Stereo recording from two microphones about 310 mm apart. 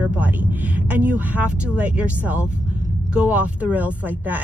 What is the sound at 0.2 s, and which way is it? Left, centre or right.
A woman's voice, centre.